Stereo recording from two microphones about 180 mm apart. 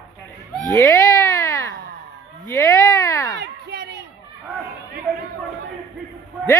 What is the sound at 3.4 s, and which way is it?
Speech, 65° right (ahead or behind).